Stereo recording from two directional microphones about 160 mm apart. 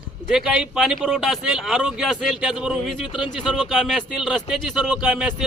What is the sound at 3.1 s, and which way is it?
Speech, 30° left (ahead or behind).